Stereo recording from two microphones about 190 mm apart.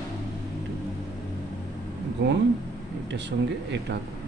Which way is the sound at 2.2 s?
65° right (ahead or behind).